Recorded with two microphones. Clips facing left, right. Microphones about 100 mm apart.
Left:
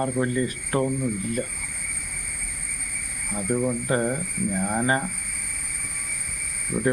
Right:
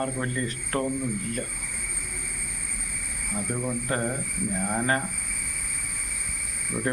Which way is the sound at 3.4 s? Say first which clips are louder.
Left 5 dB; 10° left (ahead or behind).